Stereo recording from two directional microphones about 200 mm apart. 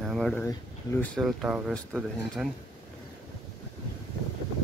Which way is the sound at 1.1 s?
Centre (ahead or behind).